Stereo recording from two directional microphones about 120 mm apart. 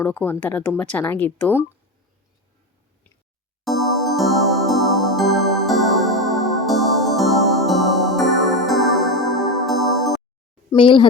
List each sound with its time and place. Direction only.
0.0 s speech: 15° left (ahead or behind)
3.6 s music: centre (ahead or behind)
10.8 s speech: 40° left (ahead or behind)